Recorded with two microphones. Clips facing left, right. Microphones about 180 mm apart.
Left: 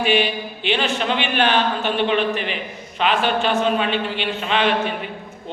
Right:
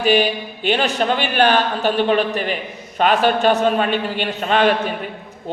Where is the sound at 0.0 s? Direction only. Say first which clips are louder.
Right 3 dB; 40° right (ahead or behind).